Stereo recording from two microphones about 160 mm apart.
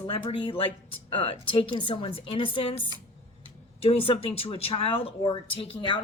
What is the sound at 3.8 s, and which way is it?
A woman's voice, 35° left (ahead or behind).